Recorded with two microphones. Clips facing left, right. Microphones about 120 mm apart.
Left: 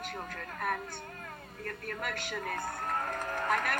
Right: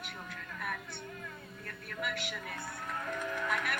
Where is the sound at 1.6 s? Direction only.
50° left (ahead or behind).